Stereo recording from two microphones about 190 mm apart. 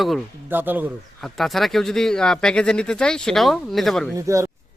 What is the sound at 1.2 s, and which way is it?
Speech, centre (ahead or behind).